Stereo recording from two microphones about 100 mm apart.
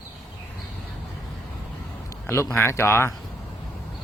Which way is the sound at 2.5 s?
25° left (ahead or behind).